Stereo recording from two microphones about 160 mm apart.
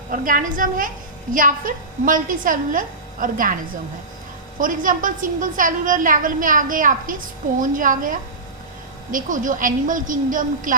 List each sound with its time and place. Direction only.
0.1 s a woman's voice: 60° right (ahead or behind)
4.6 s a woman's voice: 60° right (ahead or behind)
9.1 s a woman's voice: 55° right (ahead or behind)